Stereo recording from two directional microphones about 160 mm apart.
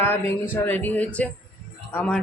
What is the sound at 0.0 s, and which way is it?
Speech, 15° left (ahead or behind).